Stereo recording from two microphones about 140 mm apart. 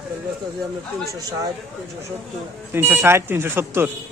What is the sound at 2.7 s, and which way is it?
Speech, 15° right (ahead or behind).